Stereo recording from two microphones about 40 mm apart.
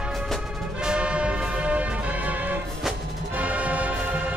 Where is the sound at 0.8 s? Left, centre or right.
Right.